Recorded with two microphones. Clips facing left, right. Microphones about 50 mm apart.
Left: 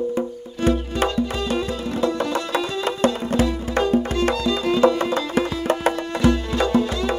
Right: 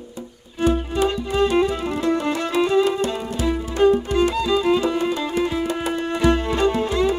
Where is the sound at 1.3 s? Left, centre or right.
Right.